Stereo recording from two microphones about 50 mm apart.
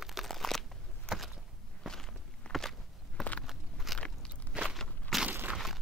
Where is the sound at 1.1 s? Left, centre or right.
Centre.